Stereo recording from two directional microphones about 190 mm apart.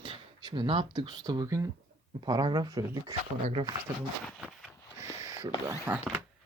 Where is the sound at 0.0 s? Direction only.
25° right (ahead or behind).